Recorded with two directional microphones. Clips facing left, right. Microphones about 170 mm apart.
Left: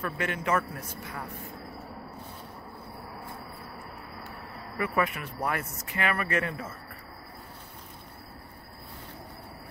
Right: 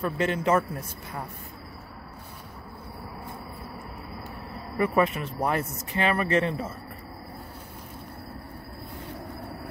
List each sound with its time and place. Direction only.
0.0 s speech: 30° right (ahead or behind)
4.7 s speech: 30° right (ahead or behind)